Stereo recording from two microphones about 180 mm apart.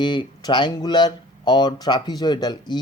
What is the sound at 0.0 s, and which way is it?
Speech, 25° left (ahead or behind).